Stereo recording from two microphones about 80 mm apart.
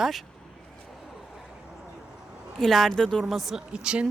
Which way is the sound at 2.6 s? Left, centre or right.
Centre.